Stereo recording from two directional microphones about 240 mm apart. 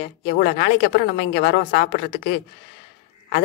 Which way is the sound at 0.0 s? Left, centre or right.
Left.